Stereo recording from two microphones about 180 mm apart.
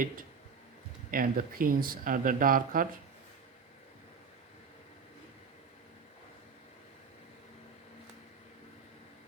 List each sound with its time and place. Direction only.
1.1 s speech: 55° right (ahead or behind)